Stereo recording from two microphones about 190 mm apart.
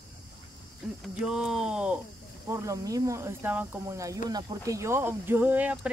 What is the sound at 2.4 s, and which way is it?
Speech, 15° right (ahead or behind).